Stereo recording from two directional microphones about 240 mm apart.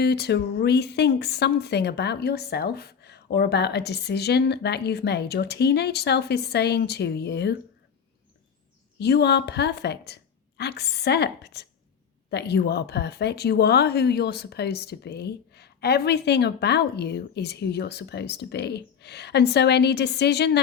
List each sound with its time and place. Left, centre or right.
0.0 s speech: left
9.0 s speech: left